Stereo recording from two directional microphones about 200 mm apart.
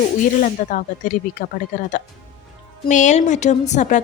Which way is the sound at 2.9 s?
35° left (ahead or behind).